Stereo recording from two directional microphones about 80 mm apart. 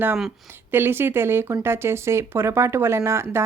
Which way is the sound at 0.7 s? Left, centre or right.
Right.